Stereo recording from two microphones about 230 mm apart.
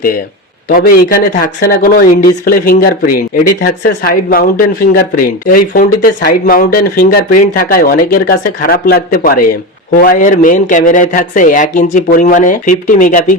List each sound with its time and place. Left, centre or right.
0.7 s speech: left